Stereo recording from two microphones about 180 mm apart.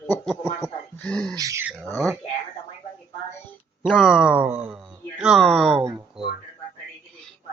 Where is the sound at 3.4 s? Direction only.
10° left (ahead or behind).